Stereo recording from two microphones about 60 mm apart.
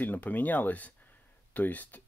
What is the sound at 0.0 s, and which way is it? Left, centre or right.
Speech, left.